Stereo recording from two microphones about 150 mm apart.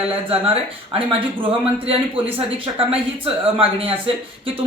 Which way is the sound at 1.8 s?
40° right (ahead or behind).